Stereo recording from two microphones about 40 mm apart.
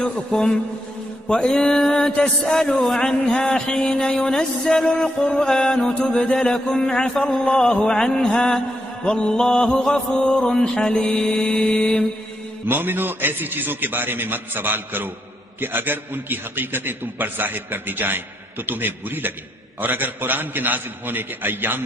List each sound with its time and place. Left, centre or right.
0.3 s music: centre
1.2 s mantra: centre
1.7 s music: centre
2.0 s music: centre
3.0 s music: centre
5.9 s mantra: left
6.3 s music: centre
7.8 s mantra: left
8.2 s music: centre
9.0 s mantra: left
9.9 s music: centre
12.6 s a man's voice: right